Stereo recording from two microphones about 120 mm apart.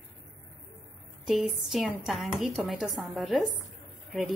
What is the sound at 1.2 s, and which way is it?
Speech, 5° right (ahead or behind).